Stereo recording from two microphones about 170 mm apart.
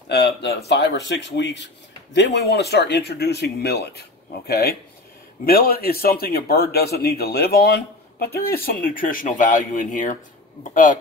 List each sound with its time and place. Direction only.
0.1 s speech: 75° left (ahead or behind)
0.7 s speech: 85° left; by 11.0 s 50° left (ahead or behind)